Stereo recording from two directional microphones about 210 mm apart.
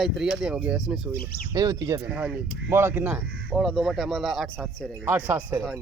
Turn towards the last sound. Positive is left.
turn(degrees=-10)  # may be behind; listen again after turning